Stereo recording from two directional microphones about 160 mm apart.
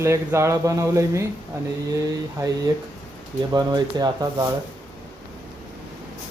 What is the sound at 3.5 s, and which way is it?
Speech, 25° right (ahead or behind).